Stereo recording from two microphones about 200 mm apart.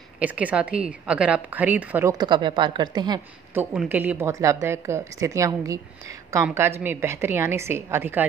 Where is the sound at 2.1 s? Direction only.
20° right (ahead or behind).